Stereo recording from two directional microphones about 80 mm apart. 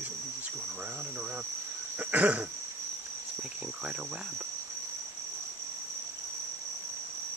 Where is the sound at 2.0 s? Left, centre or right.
Centre.